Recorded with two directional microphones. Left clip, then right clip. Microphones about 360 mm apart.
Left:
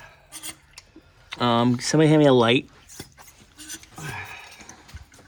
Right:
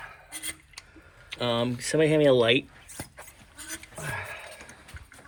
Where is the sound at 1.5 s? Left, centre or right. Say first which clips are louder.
Left 6 dB; left.